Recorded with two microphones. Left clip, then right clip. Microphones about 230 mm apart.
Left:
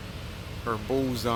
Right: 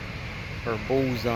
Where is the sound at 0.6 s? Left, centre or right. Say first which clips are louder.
Right 2 dB; centre.